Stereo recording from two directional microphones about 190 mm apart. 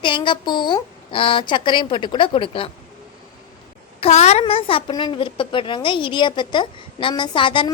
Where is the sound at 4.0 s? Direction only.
35° left (ahead or behind).